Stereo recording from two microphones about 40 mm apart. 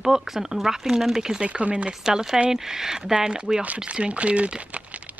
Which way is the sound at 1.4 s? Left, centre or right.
Right.